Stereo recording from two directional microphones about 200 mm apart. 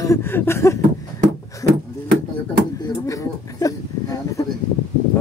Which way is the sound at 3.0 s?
15° left (ahead or behind).